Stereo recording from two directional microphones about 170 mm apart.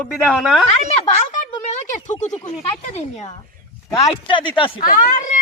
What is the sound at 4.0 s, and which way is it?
Speech, 30° left (ahead or behind).